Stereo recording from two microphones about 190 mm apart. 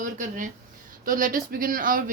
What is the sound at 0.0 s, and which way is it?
A woman's voice, 45° right (ahead or behind).